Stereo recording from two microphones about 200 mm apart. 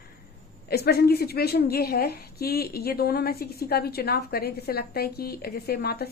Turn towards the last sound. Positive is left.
turn(degrees=50)  # may be behind; listen again after turning